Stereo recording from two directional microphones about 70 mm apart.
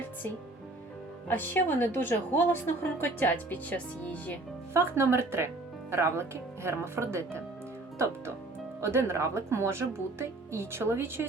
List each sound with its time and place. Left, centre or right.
1.3 s speech: left
4.7 s speech: right
8.8 s speech: right